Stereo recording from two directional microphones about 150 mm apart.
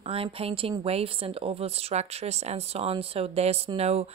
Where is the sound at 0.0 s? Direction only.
40° right (ahead or behind).